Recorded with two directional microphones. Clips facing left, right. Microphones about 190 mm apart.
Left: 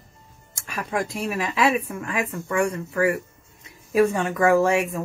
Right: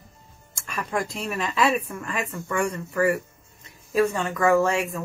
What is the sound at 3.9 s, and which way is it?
A woman's voice, 15° left (ahead or behind).